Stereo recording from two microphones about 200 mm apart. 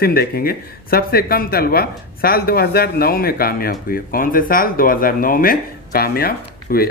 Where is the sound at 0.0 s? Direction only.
50° left (ahead or behind).